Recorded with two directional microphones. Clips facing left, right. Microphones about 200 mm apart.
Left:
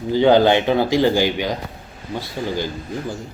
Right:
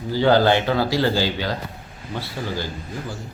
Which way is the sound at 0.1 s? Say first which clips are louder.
Left 3 dB; 20° left (ahead or behind).